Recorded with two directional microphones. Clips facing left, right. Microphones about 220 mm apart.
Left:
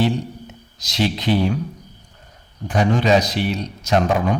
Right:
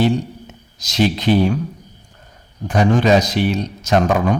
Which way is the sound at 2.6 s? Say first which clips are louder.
Right 3 dB; 45° right (ahead or behind).